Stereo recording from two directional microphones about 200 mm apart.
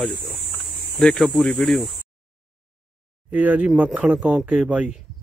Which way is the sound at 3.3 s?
5° right (ahead or behind).